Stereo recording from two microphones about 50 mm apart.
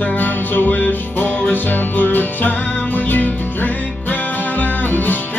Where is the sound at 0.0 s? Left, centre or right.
Left.